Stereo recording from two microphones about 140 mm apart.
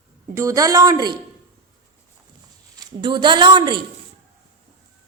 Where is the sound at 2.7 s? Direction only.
30° right (ahead or behind).